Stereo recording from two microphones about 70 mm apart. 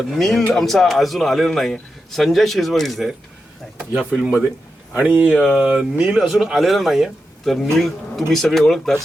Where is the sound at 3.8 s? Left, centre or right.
Centre.